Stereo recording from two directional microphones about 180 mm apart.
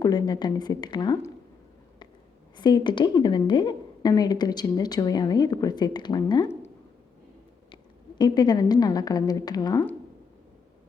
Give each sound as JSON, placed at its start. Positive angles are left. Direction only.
{"t": 0.0, "sound": "a woman's voice", "side_deg": 20}
{"t": 2.6, "sound": "a woman's voice", "side_deg": 25}
{"t": 8.2, "sound": "a woman's voice", "side_deg": 20}